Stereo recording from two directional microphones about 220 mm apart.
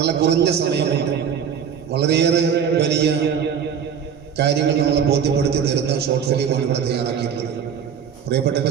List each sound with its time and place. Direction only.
0.0 s a man's voice: 50° right (ahead or behind)
1.9 s a man's voice: 50° right (ahead or behind)
4.4 s a man's voice: 50° right (ahead or behind)